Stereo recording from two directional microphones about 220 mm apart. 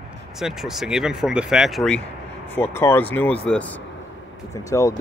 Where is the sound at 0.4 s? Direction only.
Centre (ahead or behind).